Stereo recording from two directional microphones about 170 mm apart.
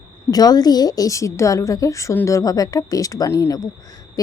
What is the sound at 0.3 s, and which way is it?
A woman's voice, 20° left (ahead or behind).